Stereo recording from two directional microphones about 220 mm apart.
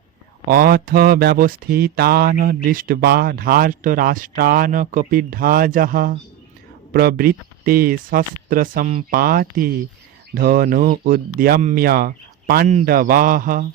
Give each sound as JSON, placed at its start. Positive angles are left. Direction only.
{"t": 0.5, "sound": "speech", "side_deg": -40}